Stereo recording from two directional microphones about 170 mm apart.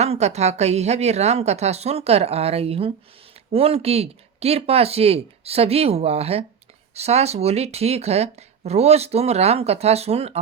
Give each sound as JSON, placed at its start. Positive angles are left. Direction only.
{"t": 0.0, "sound": "speech", "side_deg": -40}